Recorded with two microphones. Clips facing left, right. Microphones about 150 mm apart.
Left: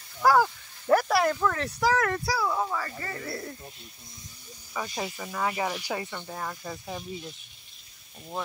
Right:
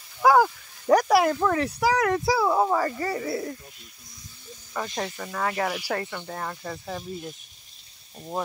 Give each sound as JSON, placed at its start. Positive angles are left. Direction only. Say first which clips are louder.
{"t": 0.3, "sound": "a sound", "louder": "right 3 dB", "side_deg": -15}
{"t": 2.5, "sound": "speech", "louder": "right 7 dB", "side_deg": -40}
{"t": 3.3, "sound": "speech", "louder": "right 7 dB", "side_deg": -5}
{"t": 4.7, "sound": "speech", "louder": "right 3 dB", "side_deg": 5}